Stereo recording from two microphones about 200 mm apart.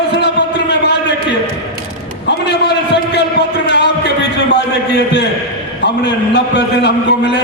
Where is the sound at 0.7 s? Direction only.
60° left (ahead or behind).